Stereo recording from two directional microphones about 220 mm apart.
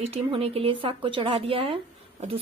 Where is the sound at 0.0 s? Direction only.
25° right (ahead or behind).